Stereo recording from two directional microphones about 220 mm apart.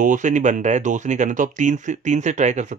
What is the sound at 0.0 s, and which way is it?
Speech, 35° right (ahead or behind).